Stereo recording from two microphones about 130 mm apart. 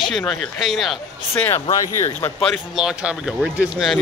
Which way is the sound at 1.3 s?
15° left (ahead or behind).